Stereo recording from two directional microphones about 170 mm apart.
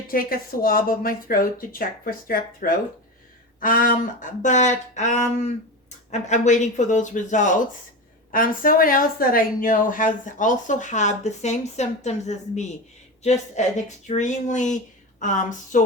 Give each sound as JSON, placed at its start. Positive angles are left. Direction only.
{"t": 0.1, "sound": "a woman's voice", "side_deg": 60}